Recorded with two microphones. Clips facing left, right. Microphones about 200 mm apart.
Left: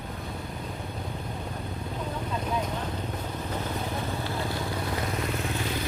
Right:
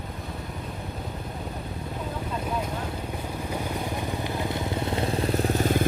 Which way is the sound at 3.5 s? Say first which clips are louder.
Right 2 dB; 15° right (ahead or behind).